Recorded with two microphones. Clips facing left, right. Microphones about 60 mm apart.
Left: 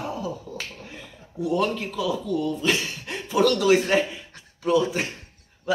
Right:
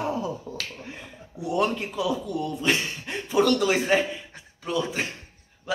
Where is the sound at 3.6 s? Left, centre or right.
Centre.